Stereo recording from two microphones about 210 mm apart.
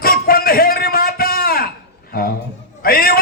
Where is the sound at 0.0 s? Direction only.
45° left (ahead or behind).